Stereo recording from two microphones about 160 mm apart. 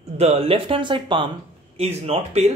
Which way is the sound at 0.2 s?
35° right (ahead or behind).